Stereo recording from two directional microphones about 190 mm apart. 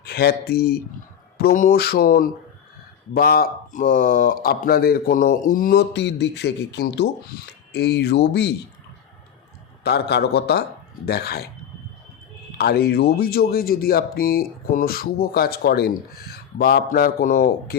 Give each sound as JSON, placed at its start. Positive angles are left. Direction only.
{"t": 0.0, "sound": "speech", "side_deg": 55}
{"t": 9.8, "sound": "speech", "side_deg": 60}
{"t": 12.5, "sound": "speech", "side_deg": 55}